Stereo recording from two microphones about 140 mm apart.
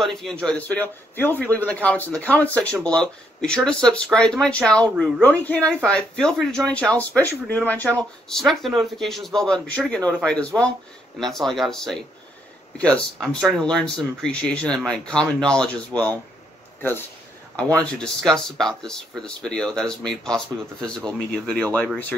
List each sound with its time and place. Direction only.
0.0 s speech: 5° left (ahead or behind)
11.1 s speech: centre (ahead or behind)
17.8 s speech: 5° left (ahead or behind)